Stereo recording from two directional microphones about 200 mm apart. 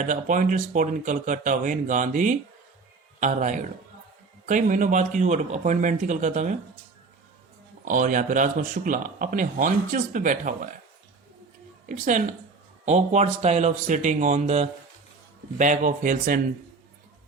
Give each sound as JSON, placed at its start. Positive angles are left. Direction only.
{"t": 0.0, "sound": "speech", "side_deg": -40}
{"t": 7.9, "sound": "speech", "side_deg": -40}
{"t": 11.9, "sound": "speech", "side_deg": -40}